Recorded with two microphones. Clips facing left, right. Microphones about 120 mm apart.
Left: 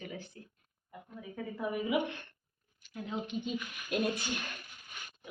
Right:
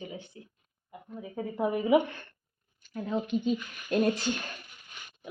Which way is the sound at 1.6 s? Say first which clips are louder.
Right 7 dB; 90° right.